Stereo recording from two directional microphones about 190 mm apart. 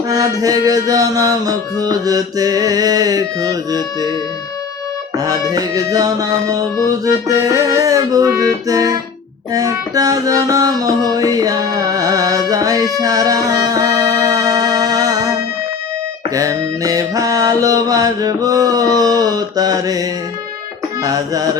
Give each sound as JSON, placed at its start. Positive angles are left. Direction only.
{"t": 0.1, "sound": "music", "side_deg": -20}
{"t": 5.1, "sound": "music", "side_deg": -20}